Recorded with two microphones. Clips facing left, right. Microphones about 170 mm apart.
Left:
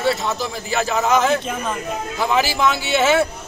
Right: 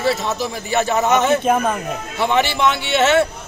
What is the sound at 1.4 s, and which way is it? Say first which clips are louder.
Speech: right 9 dB; 55° right (ahead or behind).